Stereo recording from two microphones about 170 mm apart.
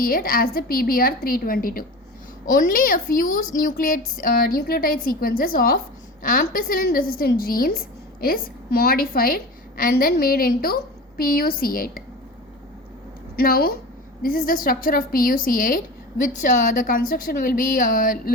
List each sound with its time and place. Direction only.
0.0 s a woman's voice: 60° left (ahead or behind)
13.3 s a woman's voice: 60° left (ahead or behind)